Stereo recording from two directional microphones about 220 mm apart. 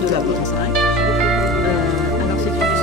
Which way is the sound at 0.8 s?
Centre (ahead or behind).